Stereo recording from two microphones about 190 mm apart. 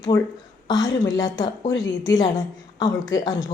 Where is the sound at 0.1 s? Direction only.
20° left (ahead or behind).